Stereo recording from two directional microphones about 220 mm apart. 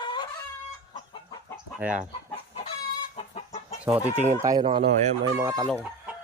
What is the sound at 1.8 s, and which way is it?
Speech, 5° right (ahead or behind).